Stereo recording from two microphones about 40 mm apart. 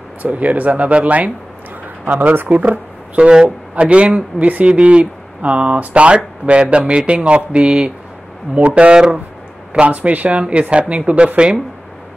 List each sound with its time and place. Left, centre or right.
0.2 s speech: right
2.1 s speech: right
2.4 s speech: right
3.2 s speech: right
4.6 s speech: right
10.4 s speech: right